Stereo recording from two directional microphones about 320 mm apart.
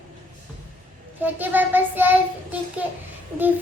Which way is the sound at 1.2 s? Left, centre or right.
Centre.